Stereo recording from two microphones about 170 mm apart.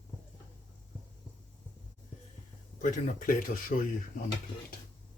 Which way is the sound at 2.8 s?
45° left (ahead or behind).